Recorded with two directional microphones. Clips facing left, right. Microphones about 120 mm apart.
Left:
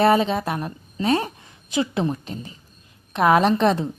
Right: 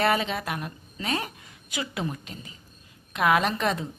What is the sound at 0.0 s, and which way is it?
A woman's voice, 30° left (ahead or behind).